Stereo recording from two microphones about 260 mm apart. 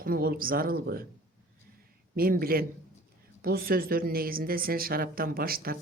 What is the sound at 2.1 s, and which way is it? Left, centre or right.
Speech, right.